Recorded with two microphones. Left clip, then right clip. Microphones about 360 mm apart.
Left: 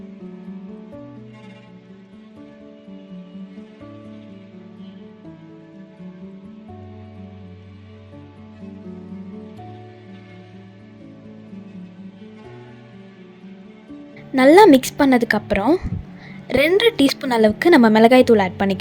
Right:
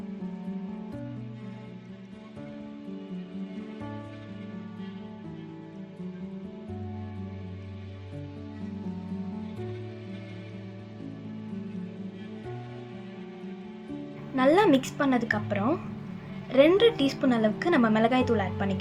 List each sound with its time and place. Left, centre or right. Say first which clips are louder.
14.3 s a woman's voice: left 12 dB; left